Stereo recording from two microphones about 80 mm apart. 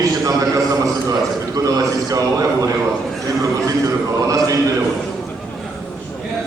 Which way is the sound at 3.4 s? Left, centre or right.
Right.